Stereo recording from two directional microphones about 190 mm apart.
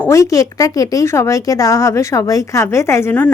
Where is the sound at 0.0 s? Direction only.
15° left (ahead or behind).